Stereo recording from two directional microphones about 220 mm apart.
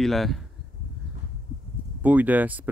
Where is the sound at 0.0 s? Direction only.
Centre (ahead or behind).